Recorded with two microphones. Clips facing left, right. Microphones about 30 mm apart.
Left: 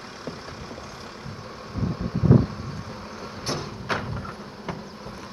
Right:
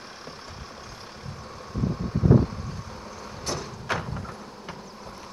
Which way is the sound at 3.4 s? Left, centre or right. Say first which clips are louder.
Left 1 dB; left.